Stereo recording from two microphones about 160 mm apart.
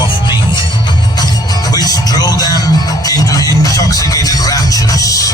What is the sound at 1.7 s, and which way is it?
Music, 25° left (ahead or behind).